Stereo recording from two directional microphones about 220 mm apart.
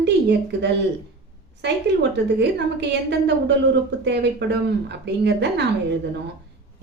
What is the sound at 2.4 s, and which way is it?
Speech, 50° right (ahead or behind).